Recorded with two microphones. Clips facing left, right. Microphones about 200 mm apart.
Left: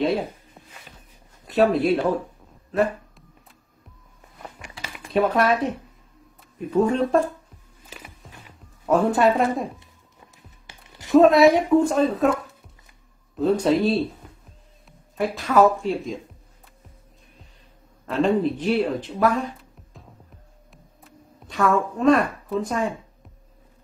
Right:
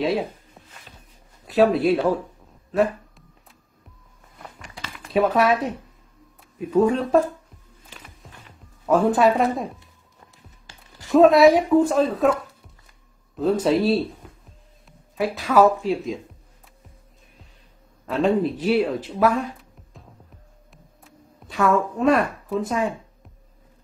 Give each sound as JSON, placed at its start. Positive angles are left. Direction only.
{"t": 0.0, "sound": "a sound", "side_deg": 0}
{"t": 1.5, "sound": "speech", "side_deg": 0}
{"t": 2.7, "sound": "a sound", "side_deg": 0}
{"t": 5.1, "sound": "speech", "side_deg": 0}
{"t": 6.7, "sound": "speech", "side_deg": -5}
{"t": 7.9, "sound": "music", "side_deg": 5}
{"t": 10.7, "sound": "music", "side_deg": 20}
{"t": 11.1, "sound": "speech", "side_deg": 0}
{"t": 13.4, "sound": "speech", "side_deg": 0}
{"t": 14.9, "sound": "a sound", "side_deg": 0}
{"t": 15.8, "sound": "speech", "side_deg": 0}
{"t": 18.0, "sound": "speech", "side_deg": -5}
{"t": 20.7, "sound": "a sound", "side_deg": 0}